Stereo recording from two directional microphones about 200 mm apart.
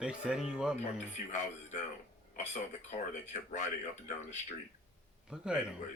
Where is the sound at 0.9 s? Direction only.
35° left (ahead or behind).